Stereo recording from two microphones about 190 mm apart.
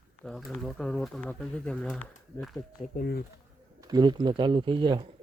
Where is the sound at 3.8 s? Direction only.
20° right (ahead or behind).